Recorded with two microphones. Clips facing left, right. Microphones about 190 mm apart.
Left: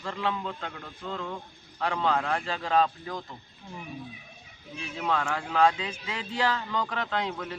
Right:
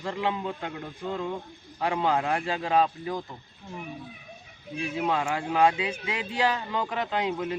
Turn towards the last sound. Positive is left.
turn(degrees=-15)  # may be behind; listen again after turning